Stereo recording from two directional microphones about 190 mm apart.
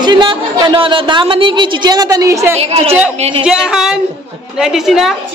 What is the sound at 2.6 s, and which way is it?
Speech, 35° right (ahead or behind).